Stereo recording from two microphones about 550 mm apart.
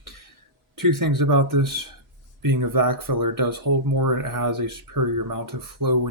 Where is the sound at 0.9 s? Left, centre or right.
Right.